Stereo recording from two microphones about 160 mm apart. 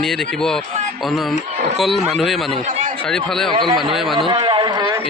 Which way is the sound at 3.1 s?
5° left (ahead or behind).